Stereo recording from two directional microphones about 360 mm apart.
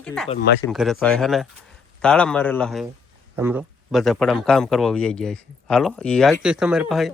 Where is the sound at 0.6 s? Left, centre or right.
Centre.